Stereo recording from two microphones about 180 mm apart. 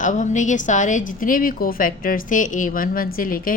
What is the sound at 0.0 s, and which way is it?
A woman's voice, 45° left (ahead or behind).